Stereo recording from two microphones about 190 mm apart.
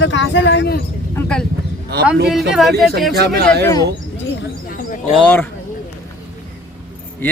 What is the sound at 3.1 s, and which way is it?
Speech, 60° right (ahead or behind).